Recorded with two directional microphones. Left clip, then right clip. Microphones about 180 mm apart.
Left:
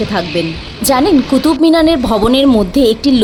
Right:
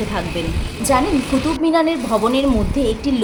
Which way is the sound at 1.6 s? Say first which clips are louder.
Left 6 dB; 50° left (ahead or behind).